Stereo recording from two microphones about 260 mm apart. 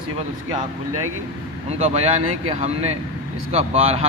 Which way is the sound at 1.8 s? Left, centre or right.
Right.